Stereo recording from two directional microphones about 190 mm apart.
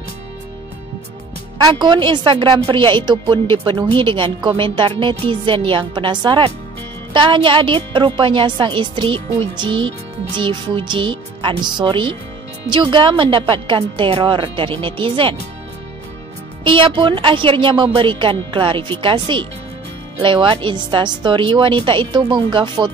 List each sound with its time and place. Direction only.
1.7 s a woman's voice: 25° right (ahead or behind)
16.6 s a woman's voice: 25° right (ahead or behind)